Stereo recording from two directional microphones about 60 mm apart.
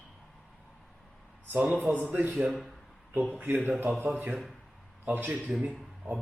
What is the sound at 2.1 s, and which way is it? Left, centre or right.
Speech, right.